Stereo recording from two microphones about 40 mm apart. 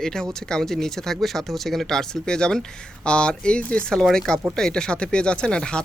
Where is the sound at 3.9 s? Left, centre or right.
Centre.